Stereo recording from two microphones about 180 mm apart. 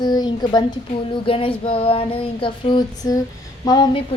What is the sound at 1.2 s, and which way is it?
Female singing, 30° left (ahead or behind).